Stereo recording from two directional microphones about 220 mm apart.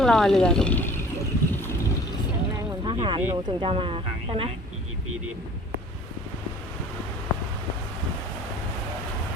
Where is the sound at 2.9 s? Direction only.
20° right (ahead or behind).